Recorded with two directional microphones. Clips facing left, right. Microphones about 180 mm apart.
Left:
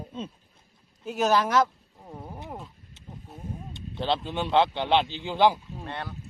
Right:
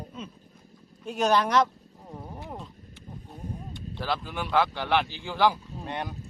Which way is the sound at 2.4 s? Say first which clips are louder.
Even; 5° left (ahead or behind).